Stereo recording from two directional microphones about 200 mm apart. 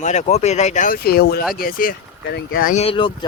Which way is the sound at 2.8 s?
25° left (ahead or behind).